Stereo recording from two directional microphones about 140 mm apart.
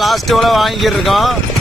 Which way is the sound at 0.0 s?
Centre (ahead or behind).